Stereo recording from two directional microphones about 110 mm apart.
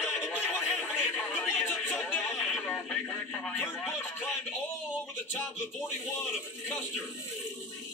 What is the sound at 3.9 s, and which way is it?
Speech, 20° left (ahead or behind).